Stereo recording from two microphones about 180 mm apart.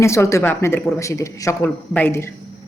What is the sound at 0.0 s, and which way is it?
A woman's voice, 15° left (ahead or behind).